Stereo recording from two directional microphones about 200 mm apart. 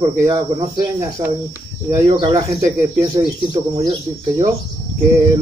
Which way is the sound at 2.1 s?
20° right (ahead or behind).